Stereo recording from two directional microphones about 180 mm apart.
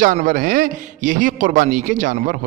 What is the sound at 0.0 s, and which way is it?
Speech, 45° right (ahead or behind).